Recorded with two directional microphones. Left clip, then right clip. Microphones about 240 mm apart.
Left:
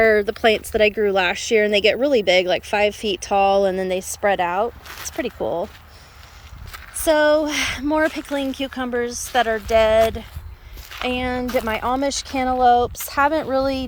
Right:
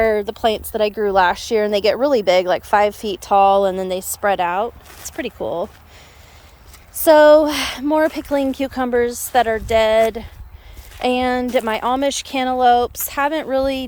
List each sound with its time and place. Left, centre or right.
0.0 s speech: centre
0.9 s speech: right
1.2 s speech: centre
1.6 s speech: right
3.2 s speech: centre
7.0 s speech: centre